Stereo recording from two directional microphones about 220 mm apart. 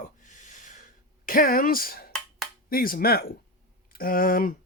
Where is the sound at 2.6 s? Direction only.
40° left (ahead or behind).